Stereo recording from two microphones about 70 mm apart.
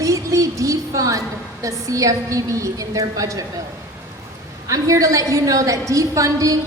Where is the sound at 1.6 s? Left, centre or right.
Right.